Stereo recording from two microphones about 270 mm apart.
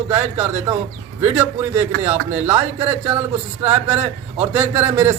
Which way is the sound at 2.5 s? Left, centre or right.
Right.